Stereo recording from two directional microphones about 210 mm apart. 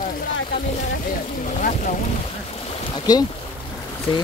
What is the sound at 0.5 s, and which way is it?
Speech, 40° left (ahead or behind).